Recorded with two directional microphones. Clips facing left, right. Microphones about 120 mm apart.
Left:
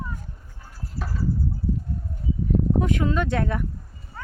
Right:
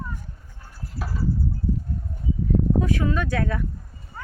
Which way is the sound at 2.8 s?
20° left (ahead or behind).